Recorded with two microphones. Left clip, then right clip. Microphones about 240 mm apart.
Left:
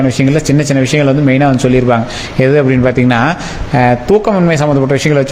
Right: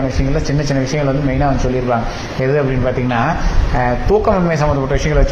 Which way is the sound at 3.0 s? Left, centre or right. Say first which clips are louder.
Left 5 dB; left.